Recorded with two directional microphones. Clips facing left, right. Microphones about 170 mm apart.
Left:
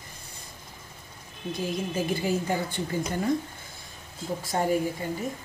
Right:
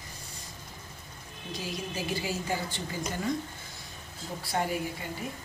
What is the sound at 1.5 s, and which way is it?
A woman's voice, 50° left (ahead or behind).